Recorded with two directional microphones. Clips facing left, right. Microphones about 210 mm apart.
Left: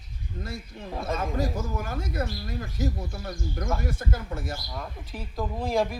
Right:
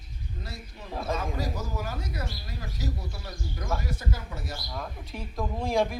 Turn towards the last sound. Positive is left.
turn(degrees=0)  # may be behind; listen again after turning